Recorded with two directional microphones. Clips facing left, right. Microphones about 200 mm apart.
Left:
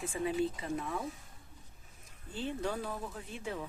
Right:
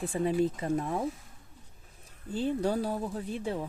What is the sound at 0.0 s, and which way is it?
Speech, 40° right (ahead or behind).